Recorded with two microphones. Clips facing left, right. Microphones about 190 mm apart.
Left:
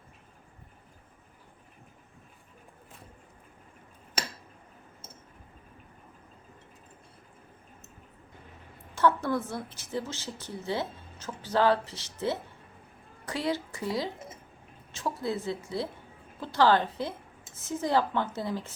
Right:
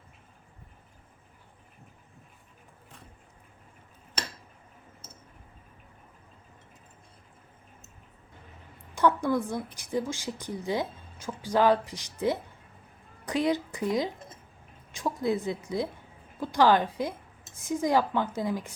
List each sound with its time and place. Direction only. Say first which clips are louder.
9.0 s a woman's voice: right 1 dB; 15° right (ahead or behind)